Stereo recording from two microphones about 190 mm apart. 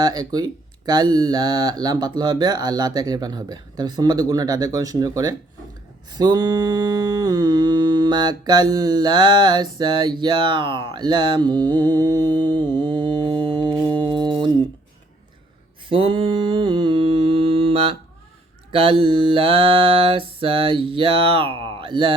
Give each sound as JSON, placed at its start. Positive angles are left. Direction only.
{"t": 0.0, "sound": "speech", "side_deg": -20}
{"t": 6.1, "sound": "mantra", "side_deg": -20}
{"t": 15.9, "sound": "humming", "side_deg": -25}
{"t": 18.7, "sound": "speech", "side_deg": -30}